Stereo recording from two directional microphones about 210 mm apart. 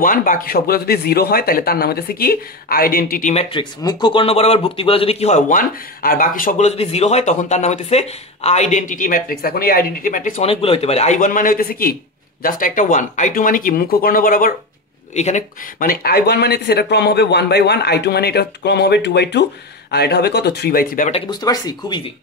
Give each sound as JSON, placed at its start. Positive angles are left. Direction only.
{"t": 0.0, "sound": "speech", "side_deg": 40}
{"t": 3.5, "sound": "speech", "side_deg": 20}
{"t": 21.1, "sound": "speech", "side_deg": 20}